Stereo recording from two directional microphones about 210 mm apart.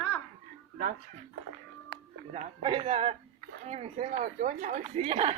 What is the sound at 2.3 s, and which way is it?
Speech, 30° right (ahead or behind).